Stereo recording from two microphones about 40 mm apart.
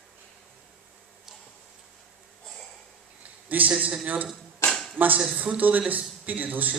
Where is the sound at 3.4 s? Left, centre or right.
Right.